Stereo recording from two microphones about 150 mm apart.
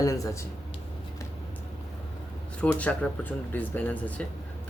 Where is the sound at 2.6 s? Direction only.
10° left (ahead or behind).